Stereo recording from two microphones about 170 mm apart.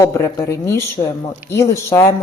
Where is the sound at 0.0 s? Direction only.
20° left (ahead or behind).